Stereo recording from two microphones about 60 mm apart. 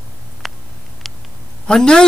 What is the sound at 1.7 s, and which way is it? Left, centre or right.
Speech, centre.